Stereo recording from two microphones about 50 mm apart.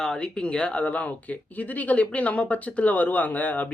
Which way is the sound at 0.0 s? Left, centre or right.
Centre.